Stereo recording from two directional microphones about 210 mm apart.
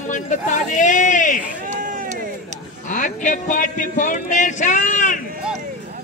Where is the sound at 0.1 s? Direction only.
35° left (ahead or behind).